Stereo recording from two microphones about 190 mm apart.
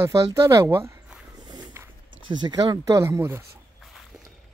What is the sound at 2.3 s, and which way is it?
Speech, 20° right (ahead or behind).